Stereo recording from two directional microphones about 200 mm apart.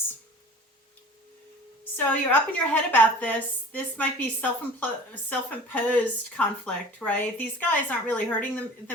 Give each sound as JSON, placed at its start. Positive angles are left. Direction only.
{"t": 2.0, "sound": "speech", "side_deg": 10}